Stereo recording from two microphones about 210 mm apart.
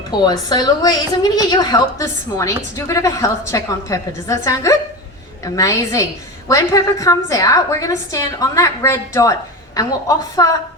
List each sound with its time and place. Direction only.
0.3 s a woman's voice: 20° left (ahead or behind)